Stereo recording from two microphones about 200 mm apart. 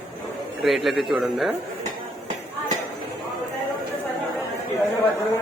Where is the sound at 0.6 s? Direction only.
Centre (ahead or behind).